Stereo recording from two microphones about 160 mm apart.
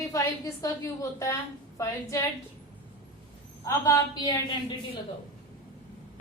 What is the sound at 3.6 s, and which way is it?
Speech, 20° left (ahead or behind).